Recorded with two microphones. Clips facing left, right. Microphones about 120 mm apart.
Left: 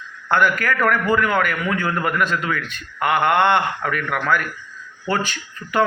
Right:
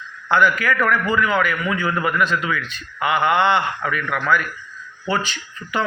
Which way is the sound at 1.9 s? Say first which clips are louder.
Even; 5° right (ahead or behind).